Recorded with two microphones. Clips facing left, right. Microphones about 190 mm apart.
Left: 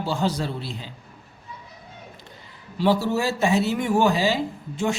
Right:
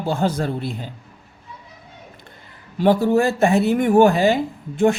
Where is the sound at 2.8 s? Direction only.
55° right (ahead or behind).